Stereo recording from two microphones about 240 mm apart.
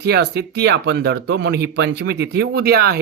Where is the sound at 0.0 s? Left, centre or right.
Right.